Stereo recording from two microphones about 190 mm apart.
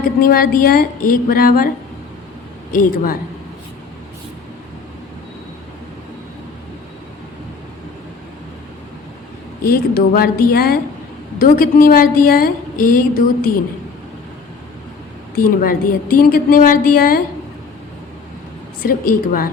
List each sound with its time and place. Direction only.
0.0 s a woman's voice: 50° left (ahead or behind)
2.7 s a woman's voice: 50° left (ahead or behind)
9.6 s a woman's voice: 50° left (ahead or behind)
15.4 s a woman's voice: 50° left (ahead or behind)
18.8 s a woman's voice: 45° left (ahead or behind)